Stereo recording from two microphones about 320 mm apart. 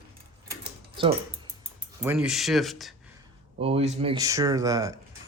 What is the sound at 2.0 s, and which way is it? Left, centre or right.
Speech, centre.